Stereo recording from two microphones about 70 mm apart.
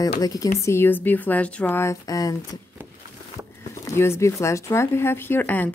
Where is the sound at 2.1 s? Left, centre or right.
Left.